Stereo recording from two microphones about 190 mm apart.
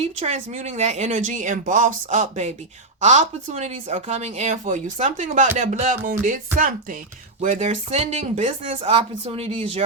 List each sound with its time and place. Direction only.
0.0 s speech: 35° right (ahead or behind)